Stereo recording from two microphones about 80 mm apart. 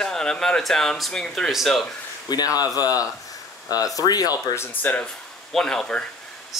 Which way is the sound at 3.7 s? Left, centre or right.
Left.